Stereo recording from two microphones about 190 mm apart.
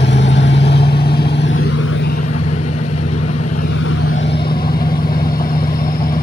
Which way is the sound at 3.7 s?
90° left.